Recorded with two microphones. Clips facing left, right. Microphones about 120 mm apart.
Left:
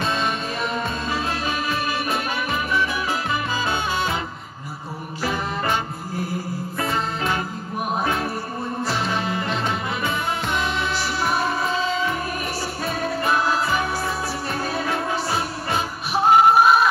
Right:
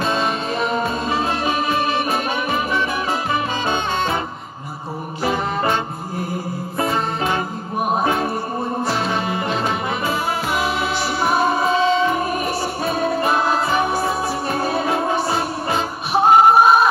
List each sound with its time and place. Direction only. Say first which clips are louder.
0.6 s music: right 5 dB; 30° right (ahead or behind)
5.2 s music: right 5 dB; 25° right (ahead or behind)
6.8 s music: right 4 dB; 25° right (ahead or behind)
11.2 s music: right 6 dB; 25° right (ahead or behind)